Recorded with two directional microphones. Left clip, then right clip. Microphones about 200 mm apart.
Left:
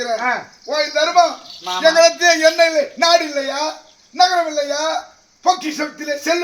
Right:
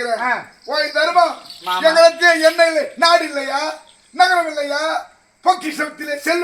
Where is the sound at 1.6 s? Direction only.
Centre (ahead or behind).